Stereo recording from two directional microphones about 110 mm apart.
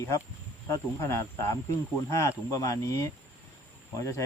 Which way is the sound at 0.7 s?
25° left (ahead or behind).